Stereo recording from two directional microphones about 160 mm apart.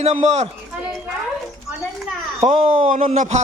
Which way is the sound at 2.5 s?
50° right (ahead or behind).